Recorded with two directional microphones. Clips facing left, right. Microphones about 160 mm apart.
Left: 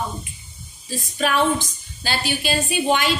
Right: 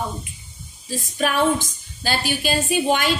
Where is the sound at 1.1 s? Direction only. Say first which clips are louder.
Even; 45° right (ahead or behind).